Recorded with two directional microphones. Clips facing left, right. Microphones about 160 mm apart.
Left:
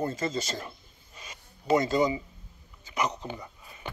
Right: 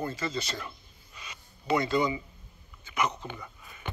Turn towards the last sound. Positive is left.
turn(degrees=35)  # may be behind; listen again after turning